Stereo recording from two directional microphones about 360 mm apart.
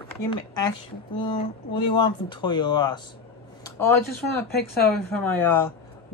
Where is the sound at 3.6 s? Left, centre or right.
Centre.